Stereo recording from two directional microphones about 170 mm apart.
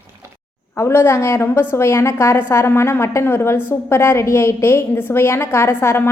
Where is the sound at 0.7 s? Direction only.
15° left (ahead or behind).